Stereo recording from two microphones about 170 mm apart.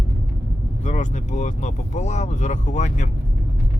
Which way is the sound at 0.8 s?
45° left (ahead or behind).